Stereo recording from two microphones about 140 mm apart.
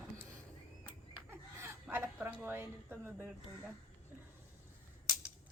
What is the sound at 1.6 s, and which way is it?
Speech, 15° right (ahead or behind).